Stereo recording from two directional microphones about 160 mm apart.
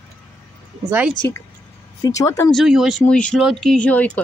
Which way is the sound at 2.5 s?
Centre (ahead or behind).